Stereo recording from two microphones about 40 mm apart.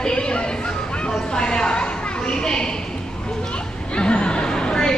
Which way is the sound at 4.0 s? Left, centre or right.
Left.